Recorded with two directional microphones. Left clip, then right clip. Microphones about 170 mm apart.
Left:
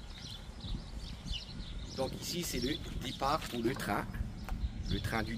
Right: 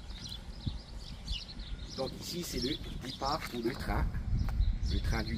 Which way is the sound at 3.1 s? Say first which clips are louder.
Left 1 dB; 20° left (ahead or behind).